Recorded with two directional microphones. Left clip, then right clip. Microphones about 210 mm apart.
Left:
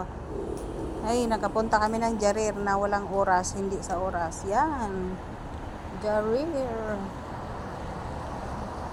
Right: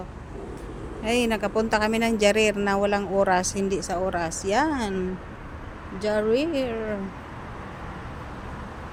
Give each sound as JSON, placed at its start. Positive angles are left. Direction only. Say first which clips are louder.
{"t": 1.0, "sound": "speech", "louder": "right 3 dB", "side_deg": -30}
{"t": 6.0, "sound": "speech", "louder": "right 3 dB", "side_deg": -45}